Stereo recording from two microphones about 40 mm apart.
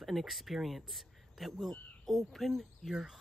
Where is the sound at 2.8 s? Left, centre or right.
Centre.